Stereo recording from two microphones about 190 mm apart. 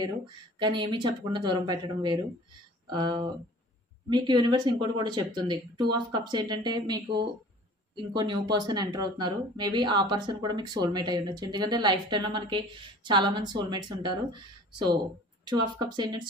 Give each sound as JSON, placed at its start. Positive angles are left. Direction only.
{"t": 0.6, "sound": "speech", "side_deg": -25}